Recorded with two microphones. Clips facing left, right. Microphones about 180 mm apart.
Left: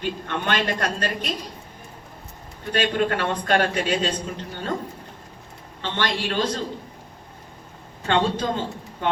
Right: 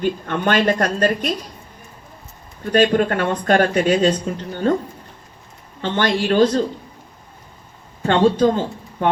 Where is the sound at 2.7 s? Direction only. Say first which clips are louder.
Right 7 dB; 45° right (ahead or behind).